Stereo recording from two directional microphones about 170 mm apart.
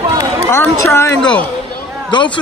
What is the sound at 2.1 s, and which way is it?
Basketball bounce, 25° left (ahead or behind).